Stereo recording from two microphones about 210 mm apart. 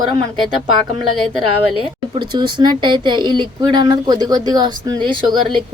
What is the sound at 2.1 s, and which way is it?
Speech, 20° right (ahead or behind).